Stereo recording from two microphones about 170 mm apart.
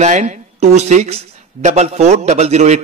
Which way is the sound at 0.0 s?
45° right (ahead or behind).